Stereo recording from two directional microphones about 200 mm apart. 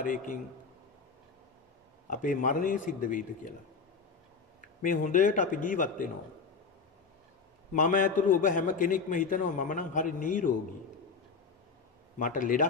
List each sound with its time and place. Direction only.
0.0 s a man's voice: 40° left (ahead or behind)
2.0 s a man's voice: 40° left (ahead or behind)
4.8 s a man's voice: 40° left (ahead or behind)
7.7 s a man's voice: 40° left (ahead or behind)
12.2 s a man's voice: 40° left (ahead or behind)